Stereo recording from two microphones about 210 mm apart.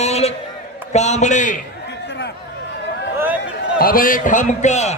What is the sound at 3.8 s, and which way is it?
A man's voice, 45° left (ahead or behind).